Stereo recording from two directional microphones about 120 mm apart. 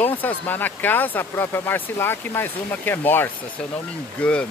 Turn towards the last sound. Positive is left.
turn(degrees=10)  # may be behind; listen again after turning